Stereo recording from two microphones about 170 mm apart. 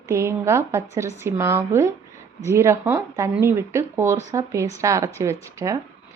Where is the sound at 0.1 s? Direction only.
15° right (ahead or behind).